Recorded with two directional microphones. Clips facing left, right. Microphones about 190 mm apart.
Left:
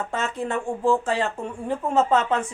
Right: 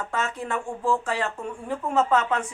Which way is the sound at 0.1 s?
25° left (ahead or behind).